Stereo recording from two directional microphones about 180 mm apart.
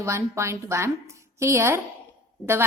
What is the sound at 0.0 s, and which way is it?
A woman's voice, 15° right (ahead or behind).